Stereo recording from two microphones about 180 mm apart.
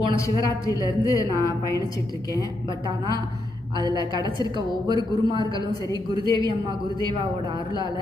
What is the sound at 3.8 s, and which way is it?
Speech, 25° right (ahead or behind).